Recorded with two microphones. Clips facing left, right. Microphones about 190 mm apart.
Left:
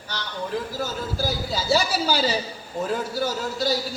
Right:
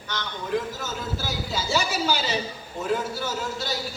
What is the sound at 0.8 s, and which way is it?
A man's voice, 35° left (ahead or behind).